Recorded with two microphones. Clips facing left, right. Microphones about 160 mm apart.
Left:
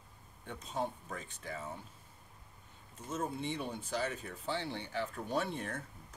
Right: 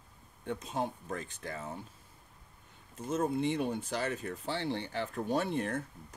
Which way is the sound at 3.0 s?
85° right.